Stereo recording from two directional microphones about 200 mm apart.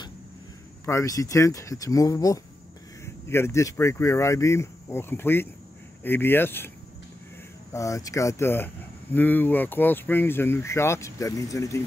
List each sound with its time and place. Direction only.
0.8 s speech: 15° left (ahead or behind)
7.7 s speech: 15° left (ahead or behind)